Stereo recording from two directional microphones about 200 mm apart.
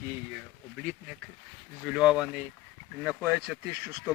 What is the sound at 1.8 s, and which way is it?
Speech, centre (ahead or behind).